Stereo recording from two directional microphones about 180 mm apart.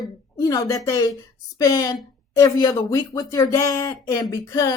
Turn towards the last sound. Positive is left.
turn(degrees=20)  # may be behind; listen again after turning